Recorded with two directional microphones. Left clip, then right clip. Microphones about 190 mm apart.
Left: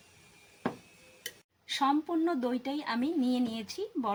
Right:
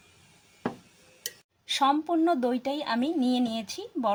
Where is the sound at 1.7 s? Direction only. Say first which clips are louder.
Right 5 dB; 35° right (ahead or behind).